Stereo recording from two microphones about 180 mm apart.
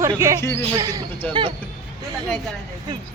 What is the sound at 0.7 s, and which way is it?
Speech, 20° right (ahead or behind).